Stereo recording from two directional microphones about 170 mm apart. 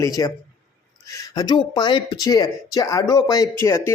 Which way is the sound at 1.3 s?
25° left (ahead or behind).